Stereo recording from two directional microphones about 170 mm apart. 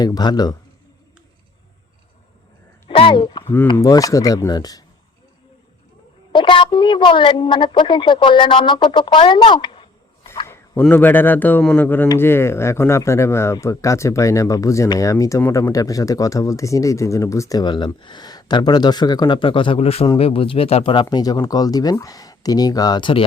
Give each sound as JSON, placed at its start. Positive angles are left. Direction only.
{"t": 0.0, "sound": "speech", "side_deg": 25}
{"t": 2.9, "sound": "speech", "side_deg": 30}
{"t": 3.4, "sound": "speech", "side_deg": 15}
{"t": 6.3, "sound": "speech", "side_deg": 30}
{"t": 10.4, "sound": "speech", "side_deg": 15}